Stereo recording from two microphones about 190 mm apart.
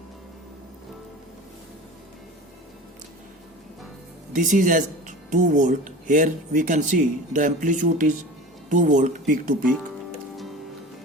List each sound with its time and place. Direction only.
4.3 s speech: 45° right (ahead or behind)